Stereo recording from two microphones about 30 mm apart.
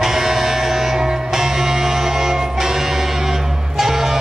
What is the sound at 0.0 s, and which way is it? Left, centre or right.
Music, centre.